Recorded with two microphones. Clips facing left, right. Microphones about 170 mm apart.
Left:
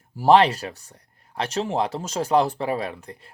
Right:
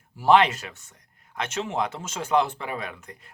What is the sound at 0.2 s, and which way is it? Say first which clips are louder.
Speech: left 3 dB; 35° left (ahead or behind).